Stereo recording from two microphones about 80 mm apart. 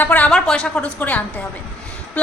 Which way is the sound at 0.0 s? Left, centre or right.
Left.